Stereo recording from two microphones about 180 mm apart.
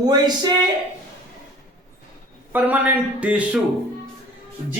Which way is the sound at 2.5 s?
10° right (ahead or behind).